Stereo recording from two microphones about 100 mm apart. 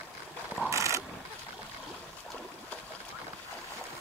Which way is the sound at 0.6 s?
30° right (ahead or behind).